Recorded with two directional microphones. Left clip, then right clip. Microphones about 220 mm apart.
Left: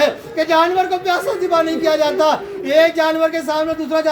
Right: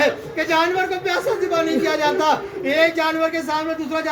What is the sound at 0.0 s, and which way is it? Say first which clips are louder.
A man's voice: left 3 dB; 20° left (ahead or behind).